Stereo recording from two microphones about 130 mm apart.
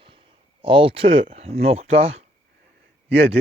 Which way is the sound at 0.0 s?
45° right (ahead or behind).